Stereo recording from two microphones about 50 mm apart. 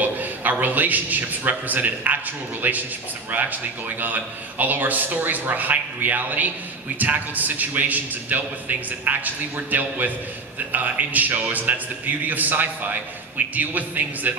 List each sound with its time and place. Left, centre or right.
0.0 s a man's voice: right